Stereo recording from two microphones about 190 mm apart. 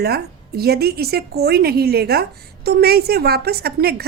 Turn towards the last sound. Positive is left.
turn(degrees=-55)  # may be behind; listen again after turning